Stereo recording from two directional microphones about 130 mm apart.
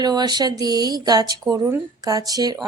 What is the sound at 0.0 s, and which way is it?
Speech, 30° right (ahead or behind).